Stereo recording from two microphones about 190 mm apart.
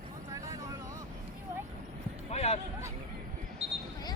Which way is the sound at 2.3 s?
35° left (ahead or behind).